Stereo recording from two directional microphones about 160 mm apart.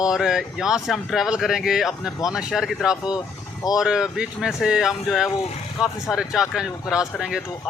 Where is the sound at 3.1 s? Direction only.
25° left (ahead or behind).